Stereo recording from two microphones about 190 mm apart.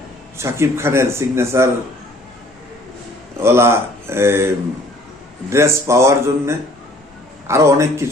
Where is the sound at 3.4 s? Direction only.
15° right (ahead or behind).